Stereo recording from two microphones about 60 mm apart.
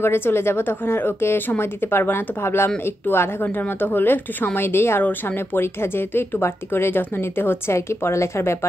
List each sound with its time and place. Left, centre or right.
0.0 s speech: left